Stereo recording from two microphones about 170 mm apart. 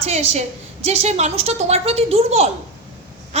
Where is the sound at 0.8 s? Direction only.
40° right (ahead or behind).